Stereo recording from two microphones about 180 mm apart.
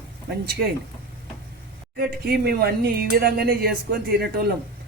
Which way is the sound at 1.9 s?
60° right (ahead or behind).